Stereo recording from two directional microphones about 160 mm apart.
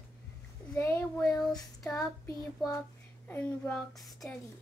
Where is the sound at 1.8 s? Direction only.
Centre (ahead or behind).